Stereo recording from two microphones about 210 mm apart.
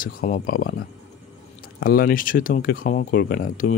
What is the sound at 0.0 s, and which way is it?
Speech, 40° left (ahead or behind).